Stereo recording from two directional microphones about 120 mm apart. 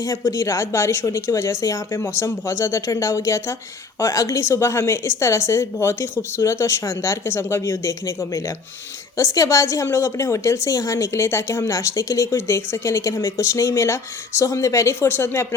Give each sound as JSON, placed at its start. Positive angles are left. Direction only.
{"t": 0.0, "sound": "a woman's voice", "side_deg": 25}